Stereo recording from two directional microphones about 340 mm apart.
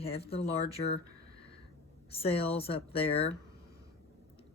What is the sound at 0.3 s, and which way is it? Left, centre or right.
Speech, centre.